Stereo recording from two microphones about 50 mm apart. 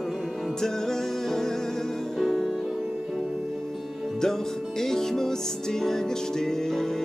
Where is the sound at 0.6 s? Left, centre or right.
Centre.